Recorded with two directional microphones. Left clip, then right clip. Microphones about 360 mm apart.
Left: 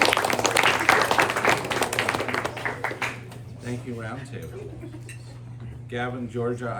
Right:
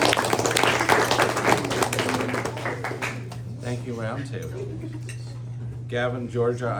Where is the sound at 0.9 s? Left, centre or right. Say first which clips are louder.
Left 1 dB; left.